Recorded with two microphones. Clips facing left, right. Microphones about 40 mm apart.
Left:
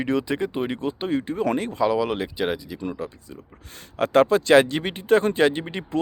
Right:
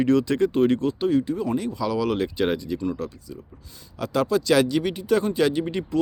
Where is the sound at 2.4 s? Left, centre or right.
Centre.